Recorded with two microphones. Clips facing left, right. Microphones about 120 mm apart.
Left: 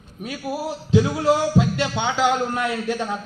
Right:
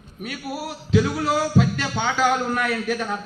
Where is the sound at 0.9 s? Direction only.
25° left (ahead or behind).